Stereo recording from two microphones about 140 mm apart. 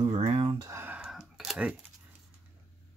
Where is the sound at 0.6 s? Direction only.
20° right (ahead or behind).